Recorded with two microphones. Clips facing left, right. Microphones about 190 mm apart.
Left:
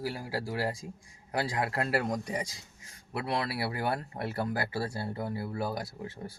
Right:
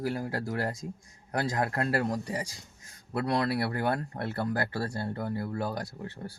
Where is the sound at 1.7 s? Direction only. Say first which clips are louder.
Right 1 dB; 15° left (ahead or behind).